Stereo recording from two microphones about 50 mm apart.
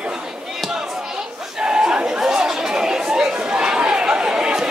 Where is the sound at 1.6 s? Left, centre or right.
Centre.